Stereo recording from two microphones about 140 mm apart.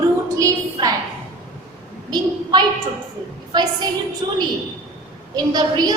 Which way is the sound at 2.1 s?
30° right (ahead or behind).